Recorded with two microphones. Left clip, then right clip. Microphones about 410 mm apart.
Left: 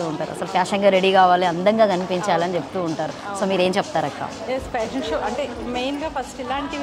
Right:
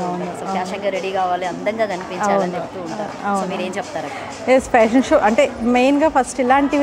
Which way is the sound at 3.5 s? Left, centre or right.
Left.